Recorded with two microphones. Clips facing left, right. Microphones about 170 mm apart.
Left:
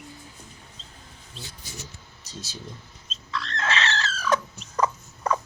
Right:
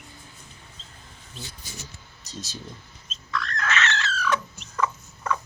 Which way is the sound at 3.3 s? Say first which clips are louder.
Even; 25° left (ahead or behind).